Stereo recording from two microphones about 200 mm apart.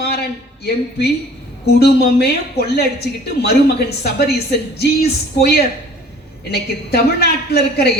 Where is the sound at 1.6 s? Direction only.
55° left (ahead or behind).